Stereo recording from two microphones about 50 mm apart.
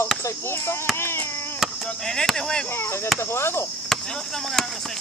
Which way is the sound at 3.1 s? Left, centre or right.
Left.